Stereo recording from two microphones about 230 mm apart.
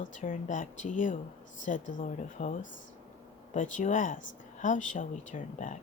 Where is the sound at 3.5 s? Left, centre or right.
Left.